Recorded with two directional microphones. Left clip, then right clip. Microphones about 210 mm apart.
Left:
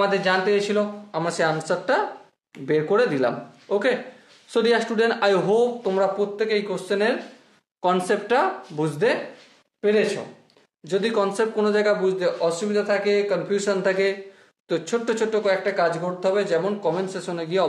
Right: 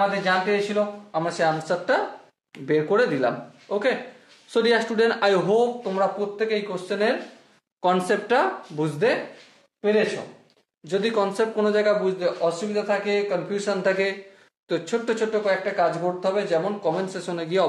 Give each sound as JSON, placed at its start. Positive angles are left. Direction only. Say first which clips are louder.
{"t": 0.1, "sound": "speech", "louder": "left 2 dB", "side_deg": 50}
{"t": 2.6, "sound": "speech", "louder": "left 1 dB", "side_deg": 15}
{"t": 3.6, "sound": "speech", "louder": "left 2 dB", "side_deg": 30}
{"t": 4.5, "sound": "speech", "louder": "even", "side_deg": 10}
{"t": 5.9, "sound": "speech", "louder": "left 2 dB", "side_deg": 35}
{"t": 7.8, "sound": "speech", "louder": "even", "side_deg": 0}
{"t": 9.8, "sound": "speech", "louder": "left 1 dB", "side_deg": 40}
{"t": 10.8, "sound": "speech", "louder": "left 1 dB", "side_deg": 15}
{"t": 13.8, "sound": "speech", "louder": "left 1 dB", "side_deg": 15}
{"t": 15.1, "sound": "speech", "louder": "left 2 dB", "side_deg": 30}
{"t": 16.8, "sound": "speech", "louder": "left 1 dB", "side_deg": 10}